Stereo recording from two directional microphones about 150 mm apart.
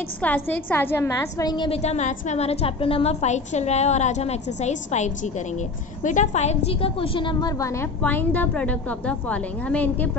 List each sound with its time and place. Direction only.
0.2 s a woman's voice: 10° left (ahead or behind); by 1.7 s 25° left (ahead or behind)
1.7 s a woman's voice: 45° left (ahead or behind); by 10.1 s 10° left (ahead or behind)